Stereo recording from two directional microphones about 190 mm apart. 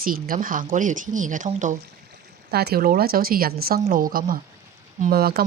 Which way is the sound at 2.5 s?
55° right (ahead or behind).